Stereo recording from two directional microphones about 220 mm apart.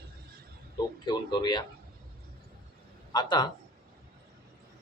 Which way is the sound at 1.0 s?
20° left (ahead or behind).